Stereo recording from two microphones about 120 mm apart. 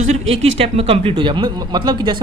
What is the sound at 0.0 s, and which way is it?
Speech, 65° right (ahead or behind).